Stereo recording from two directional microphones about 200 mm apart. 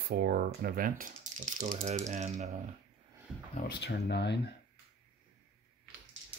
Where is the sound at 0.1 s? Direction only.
50° right (ahead or behind).